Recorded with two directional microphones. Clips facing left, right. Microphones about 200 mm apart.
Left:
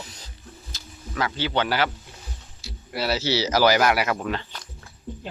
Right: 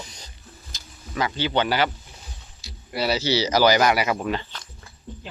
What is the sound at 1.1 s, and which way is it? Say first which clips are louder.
Speech: right 2 dB; 5° left (ahead or behind).